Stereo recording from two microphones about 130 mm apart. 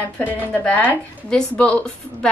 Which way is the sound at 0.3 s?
10° left (ahead or behind).